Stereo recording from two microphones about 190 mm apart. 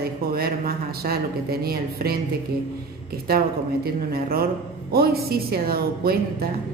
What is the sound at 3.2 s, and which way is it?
Speech, 50° right (ahead or behind).